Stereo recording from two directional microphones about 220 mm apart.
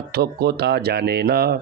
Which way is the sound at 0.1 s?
45° right (ahead or behind).